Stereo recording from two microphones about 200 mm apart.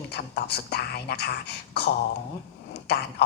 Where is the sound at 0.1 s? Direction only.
55° left (ahead or behind).